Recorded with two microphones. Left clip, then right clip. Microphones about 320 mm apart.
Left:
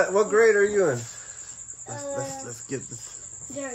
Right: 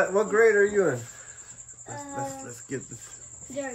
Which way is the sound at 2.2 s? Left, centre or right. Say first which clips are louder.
Left 1 dB; centre.